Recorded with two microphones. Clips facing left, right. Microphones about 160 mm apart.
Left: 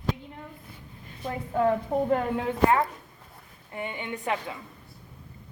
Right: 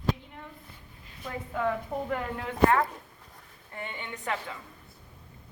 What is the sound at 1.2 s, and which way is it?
A woman's voice, 30° left (ahead or behind).